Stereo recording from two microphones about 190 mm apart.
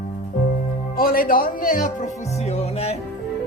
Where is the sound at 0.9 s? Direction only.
50° left (ahead or behind); by 2.9 s 35° left (ahead or behind).